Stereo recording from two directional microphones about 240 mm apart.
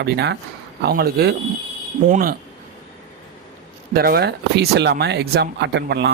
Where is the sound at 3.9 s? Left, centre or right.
Right.